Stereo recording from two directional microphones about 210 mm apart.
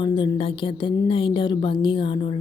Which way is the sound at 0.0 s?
25° left (ahead or behind).